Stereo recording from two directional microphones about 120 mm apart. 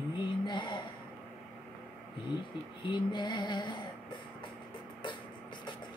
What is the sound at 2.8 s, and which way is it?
Female singing, 40° left (ahead or behind).